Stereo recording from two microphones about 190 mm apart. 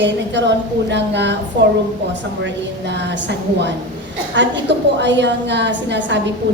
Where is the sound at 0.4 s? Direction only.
70° right (ahead or behind).